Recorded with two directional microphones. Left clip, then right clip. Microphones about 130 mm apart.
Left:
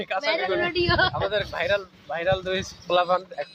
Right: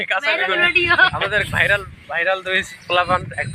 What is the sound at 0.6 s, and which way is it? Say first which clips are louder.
Speech: right 8 dB; 20° left (ahead or behind).